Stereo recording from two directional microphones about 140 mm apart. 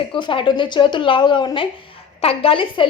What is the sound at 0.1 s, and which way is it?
A woman's voice, 35° left (ahead or behind).